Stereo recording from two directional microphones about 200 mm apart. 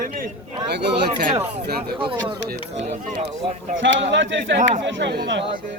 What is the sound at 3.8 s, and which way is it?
A man's voice, 65° right (ahead or behind).